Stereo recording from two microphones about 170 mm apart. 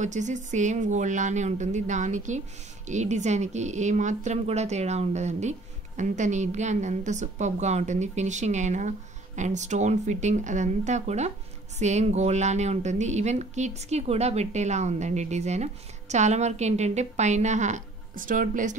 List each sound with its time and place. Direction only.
0.0 s speech: 45° right (ahead or behind)